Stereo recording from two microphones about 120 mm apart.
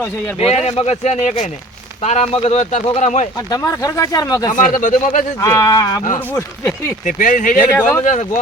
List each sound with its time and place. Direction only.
0.3 s speech: 60° left (ahead or behind); by 3.2 s 85° left
3.3 s speech: 30° left (ahead or behind)
4.5 s speech: 90° left
5.4 s speech: 30° left (ahead or behind)
6.1 s speech: 15° left (ahead or behind)
7.0 s speech: 90° left
7.6 s speech: 15° left (ahead or behind)
8.0 s speech: 90° left